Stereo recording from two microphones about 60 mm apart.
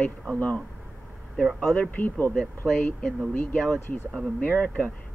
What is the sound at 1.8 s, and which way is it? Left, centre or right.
Speech, left.